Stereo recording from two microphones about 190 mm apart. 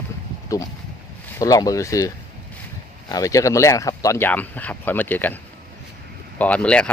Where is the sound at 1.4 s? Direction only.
20° left (ahead or behind).